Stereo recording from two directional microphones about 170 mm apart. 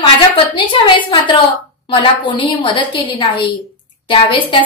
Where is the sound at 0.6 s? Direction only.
30° left (ahead or behind).